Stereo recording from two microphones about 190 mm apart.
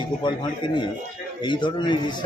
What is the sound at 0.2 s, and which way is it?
A man's voice, 25° left (ahead or behind).